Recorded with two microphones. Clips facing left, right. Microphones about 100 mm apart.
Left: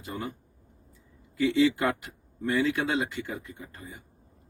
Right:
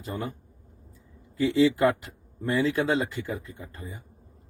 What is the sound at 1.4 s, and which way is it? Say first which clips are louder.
Speech: right 2 dB; 30° right (ahead or behind).